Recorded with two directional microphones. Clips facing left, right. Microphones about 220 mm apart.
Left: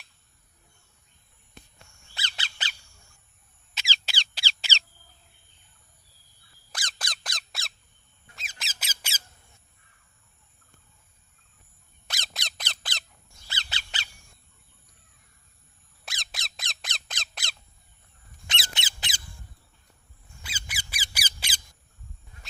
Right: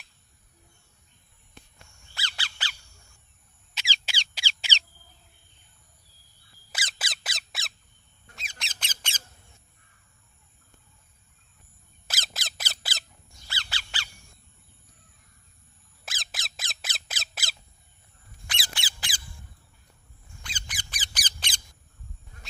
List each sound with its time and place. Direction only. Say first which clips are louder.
2.1 s bird: even; 20° left (ahead or behind)
3.8 s a sound: left 1 dB; 10° right (ahead or behind)
6.7 s squeak: right 1 dB; 5° right (ahead or behind)
12.0 s squeak: right 1 dB; centre (ahead or behind)
13.5 s bird: even; 20° left (ahead or behind)
16.0 s squeak: right 1 dB; centre (ahead or behind)
18.4 s squeak: left 1 dB; 25° left (ahead or behind)
20.4 s squeak: left 1 dB; 5° left (ahead or behind)